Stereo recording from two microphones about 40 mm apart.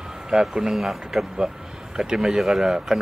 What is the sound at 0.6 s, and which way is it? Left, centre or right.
Speech, centre.